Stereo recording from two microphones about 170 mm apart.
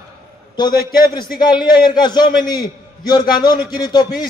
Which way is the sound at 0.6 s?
25° left (ahead or behind).